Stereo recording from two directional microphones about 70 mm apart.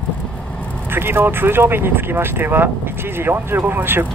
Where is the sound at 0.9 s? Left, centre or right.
Right.